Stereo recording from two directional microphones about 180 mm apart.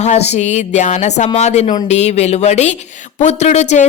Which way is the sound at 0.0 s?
35° left (ahead or behind).